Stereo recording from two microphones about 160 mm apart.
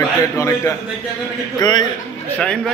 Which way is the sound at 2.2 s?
10° left (ahead or behind).